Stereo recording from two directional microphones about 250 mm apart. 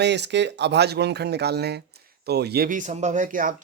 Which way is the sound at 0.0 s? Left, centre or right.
Right.